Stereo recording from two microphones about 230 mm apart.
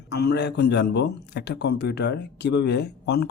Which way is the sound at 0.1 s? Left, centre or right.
Left.